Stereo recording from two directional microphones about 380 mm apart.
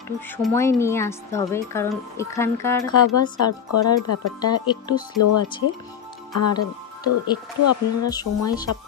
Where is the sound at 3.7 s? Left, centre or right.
Left.